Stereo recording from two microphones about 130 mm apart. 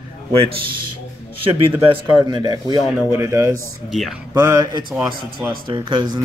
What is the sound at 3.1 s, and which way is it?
A man's voice, 20° right (ahead or behind).